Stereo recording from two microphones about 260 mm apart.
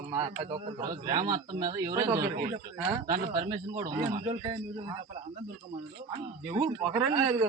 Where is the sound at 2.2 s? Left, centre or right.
Right.